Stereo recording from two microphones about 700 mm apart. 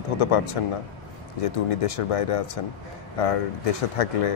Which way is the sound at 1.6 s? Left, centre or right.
Left.